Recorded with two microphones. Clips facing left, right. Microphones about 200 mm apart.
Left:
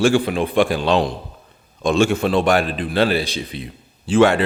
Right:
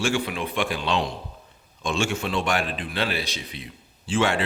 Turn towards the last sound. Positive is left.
turn(degrees=40)  # may be behind; listen again after turning